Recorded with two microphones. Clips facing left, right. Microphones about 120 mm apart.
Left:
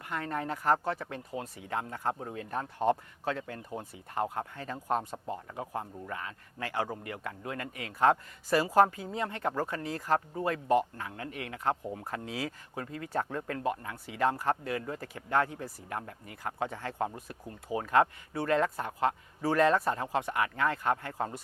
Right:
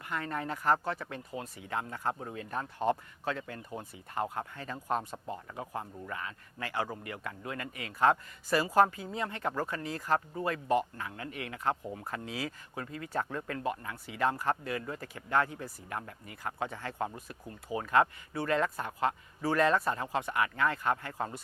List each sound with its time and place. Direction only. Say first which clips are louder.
0.0 s speech: left 1 dB; 45° left (ahead or behind)